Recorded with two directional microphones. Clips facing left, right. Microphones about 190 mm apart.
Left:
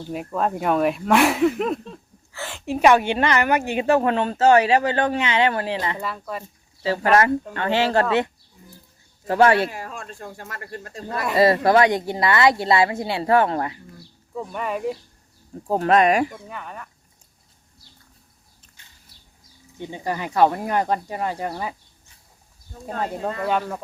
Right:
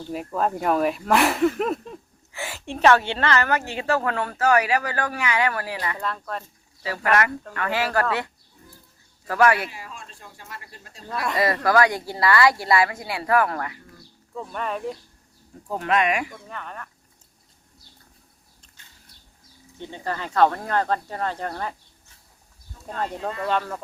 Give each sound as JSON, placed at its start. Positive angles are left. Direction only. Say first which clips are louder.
{"t": 0.1, "sound": "speech", "louder": "left 1 dB", "side_deg": 0}
{"t": 2.6, "sound": "speech", "louder": "left 2 dB", "side_deg": 5}
{"t": 6.0, "sound": "speech", "louder": "even", "side_deg": 5}
{"t": 6.8, "sound": "speech", "louder": "left 5 dB", "side_deg": 30}
{"t": 9.2, "sound": "speech", "louder": "left 3 dB", "side_deg": 25}
{"t": 9.6, "sound": "speech", "louder": "left 7 dB", "side_deg": 50}
{"t": 11.3, "sound": "speech", "louder": "left 4 dB", "side_deg": 25}
{"t": 14.3, "sound": "speech", "louder": "left 2 dB", "side_deg": 5}
{"t": 15.6, "sound": "speech", "louder": "left 6 dB", "side_deg": 35}
{"t": 16.3, "sound": "speech", "louder": "left 2 dB", "side_deg": 5}
{"t": 19.8, "sound": "speech", "louder": "left 3 dB", "side_deg": 15}
{"t": 22.9, "sound": "speech", "louder": "left 2 dB", "side_deg": 45}
{"t": 23.5, "sound": "speech", "louder": "left 1 dB", "side_deg": 5}